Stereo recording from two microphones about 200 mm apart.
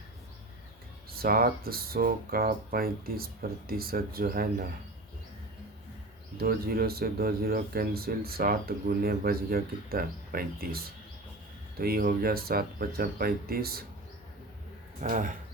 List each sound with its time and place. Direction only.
1.1 s speech: 50° right (ahead or behind)
6.3 s speech: 50° right (ahead or behind)
15.0 s speech: 40° right (ahead or behind)